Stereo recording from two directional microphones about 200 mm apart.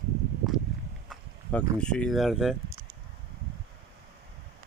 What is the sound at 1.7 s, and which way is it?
Speech, 5° left (ahead or behind).